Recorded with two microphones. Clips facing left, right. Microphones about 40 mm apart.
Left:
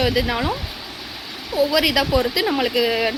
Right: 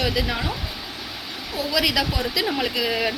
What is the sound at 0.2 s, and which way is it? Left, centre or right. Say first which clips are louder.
Speech: left 4 dB; left.